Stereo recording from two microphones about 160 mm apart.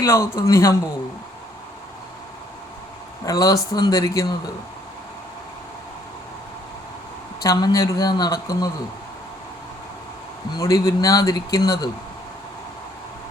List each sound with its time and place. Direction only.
0.0 s speech: 20° left (ahead or behind)
3.2 s speech: 20° left (ahead or behind)
7.4 s speech: 25° left (ahead or behind)
10.5 s speech: 20° left (ahead or behind)